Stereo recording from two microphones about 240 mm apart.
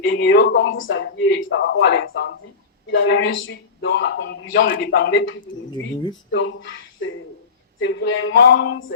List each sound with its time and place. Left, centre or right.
0.1 s speech: left
4.7 s a man's voice: left